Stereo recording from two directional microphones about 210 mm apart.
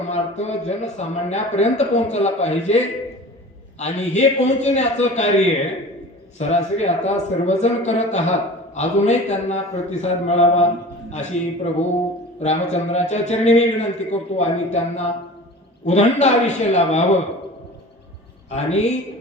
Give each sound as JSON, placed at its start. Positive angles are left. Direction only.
{"t": 0.1, "sound": "a man's voice", "side_deg": 30}
{"t": 6.4, "sound": "a man's voice", "side_deg": 30}
{"t": 18.5, "sound": "a man's voice", "side_deg": 30}